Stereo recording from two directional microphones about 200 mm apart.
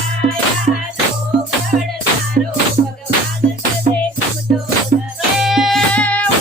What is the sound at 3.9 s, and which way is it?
Music, 40° right (ahead or behind).